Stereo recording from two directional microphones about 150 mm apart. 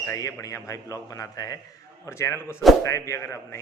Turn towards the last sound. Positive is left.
turn(degrees=20)  # may be behind; listen again after turning